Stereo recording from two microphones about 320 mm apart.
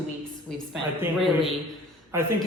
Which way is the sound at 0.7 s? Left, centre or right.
Centre.